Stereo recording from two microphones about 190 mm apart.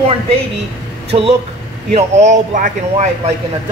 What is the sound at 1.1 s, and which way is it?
Speech, 30° right (ahead or behind).